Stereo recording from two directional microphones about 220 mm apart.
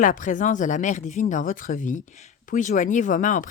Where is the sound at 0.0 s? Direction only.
35° left (ahead or behind).